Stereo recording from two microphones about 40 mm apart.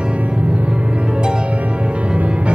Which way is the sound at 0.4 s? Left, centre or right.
Right.